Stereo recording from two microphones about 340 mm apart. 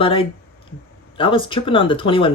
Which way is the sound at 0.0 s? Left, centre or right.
Centre.